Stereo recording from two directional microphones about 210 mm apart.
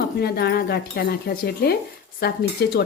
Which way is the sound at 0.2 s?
50° left (ahead or behind).